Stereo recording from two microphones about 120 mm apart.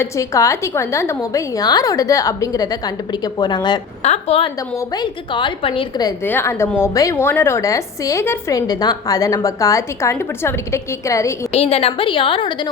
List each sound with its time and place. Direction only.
0.0 s a woman's voice: 25° left (ahead or behind)
4.0 s a woman's voice: 65° left (ahead or behind)
4.9 s a woman's voice: 40° left (ahead or behind)
6.2 s a woman's voice: 20° left (ahead or behind)
11.5 s a woman's voice: 55° left (ahead or behind)